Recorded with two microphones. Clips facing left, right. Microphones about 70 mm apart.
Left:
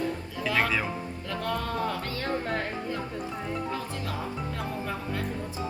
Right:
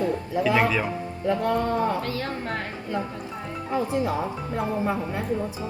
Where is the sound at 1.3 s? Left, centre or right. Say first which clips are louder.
Right 8 dB; right.